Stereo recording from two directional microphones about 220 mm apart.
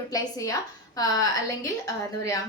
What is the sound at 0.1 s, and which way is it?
Speech, 15° left (ahead or behind).